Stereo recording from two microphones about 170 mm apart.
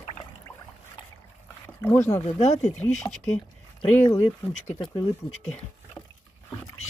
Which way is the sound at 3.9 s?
15° left (ahead or behind).